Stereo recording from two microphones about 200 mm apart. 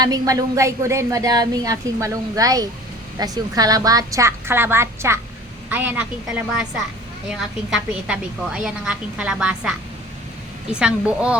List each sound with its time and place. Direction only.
0.0 s a woman's voice: 20° right (ahead or behind)